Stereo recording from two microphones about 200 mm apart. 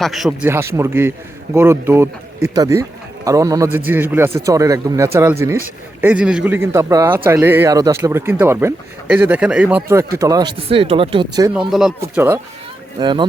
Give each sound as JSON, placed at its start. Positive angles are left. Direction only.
{"t": 0.0, "sound": "speech", "side_deg": 0}
{"t": 11.7, "sound": "speech", "side_deg": 0}
{"t": 11.9, "sound": "speech", "side_deg": -15}